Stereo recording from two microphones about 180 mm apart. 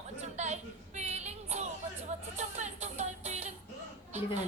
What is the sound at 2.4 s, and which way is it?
Music, 40° right (ahead or behind).